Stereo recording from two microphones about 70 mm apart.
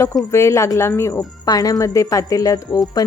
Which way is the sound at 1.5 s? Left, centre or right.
Left.